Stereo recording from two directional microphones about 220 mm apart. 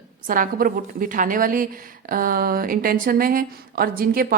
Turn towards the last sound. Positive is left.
turn(degrees=-40)  # may be behind; listen again after turning